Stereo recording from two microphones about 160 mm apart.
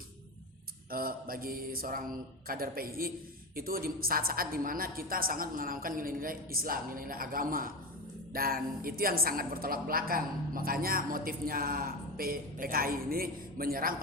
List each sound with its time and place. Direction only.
0.9 s a woman's voice: 65° right (ahead or behind)